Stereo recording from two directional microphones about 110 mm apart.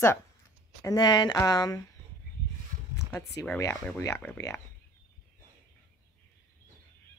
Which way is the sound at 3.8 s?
25° left (ahead or behind).